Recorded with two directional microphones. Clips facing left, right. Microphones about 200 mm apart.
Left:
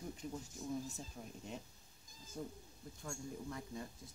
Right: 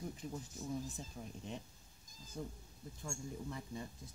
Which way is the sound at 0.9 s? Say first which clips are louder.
Right 1 dB; centre (ahead or behind).